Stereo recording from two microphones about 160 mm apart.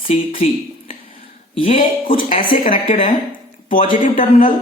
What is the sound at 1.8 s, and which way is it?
A woman's voice, 55° left (ahead or behind).